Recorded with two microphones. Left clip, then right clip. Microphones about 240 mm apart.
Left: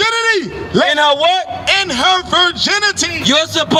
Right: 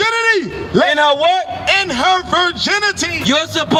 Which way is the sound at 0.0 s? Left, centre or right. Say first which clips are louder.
Even; centre.